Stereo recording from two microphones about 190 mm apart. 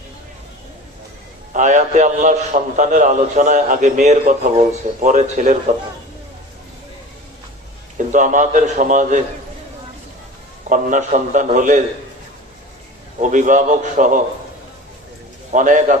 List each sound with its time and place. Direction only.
1.5 s a man's voice: 40° right (ahead or behind)
7.9 s a man's voice: 40° right (ahead or behind)
10.7 s a man's voice: 40° right (ahead or behind)
13.1 s a man's voice: 40° right (ahead or behind)
15.5 s a man's voice: 45° right (ahead or behind)